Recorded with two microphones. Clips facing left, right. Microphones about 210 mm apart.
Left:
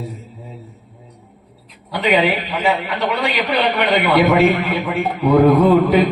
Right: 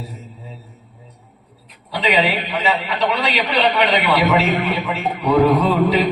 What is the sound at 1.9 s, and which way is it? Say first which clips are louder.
A man's voice: left 2 dB; 55° left (ahead or behind).